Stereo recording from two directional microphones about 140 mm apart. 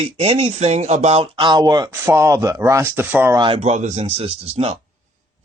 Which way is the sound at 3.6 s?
55° right (ahead or behind).